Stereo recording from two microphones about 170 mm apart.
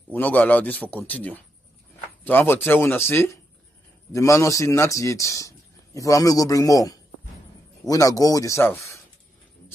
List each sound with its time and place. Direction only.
0.1 s a man's voice: 10° left (ahead or behind)